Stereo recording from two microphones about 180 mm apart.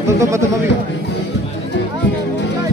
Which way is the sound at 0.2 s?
15° right (ahead or behind).